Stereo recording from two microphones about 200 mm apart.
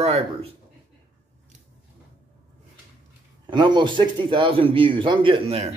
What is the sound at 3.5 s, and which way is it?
Speech, 20° right (ahead or behind).